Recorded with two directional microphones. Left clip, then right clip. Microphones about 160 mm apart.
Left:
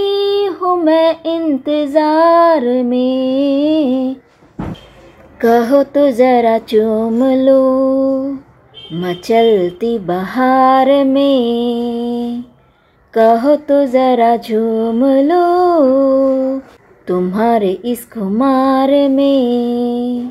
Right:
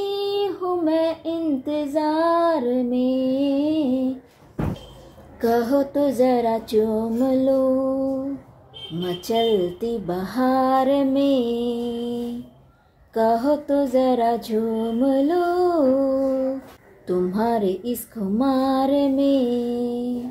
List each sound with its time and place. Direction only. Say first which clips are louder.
0.0 s a sound: left 10 dB; 10° left (ahead or behind)
5.4 s music: left 9 dB; 10° left (ahead or behind)
9.3 s music: left 10 dB; 15° left (ahead or behind)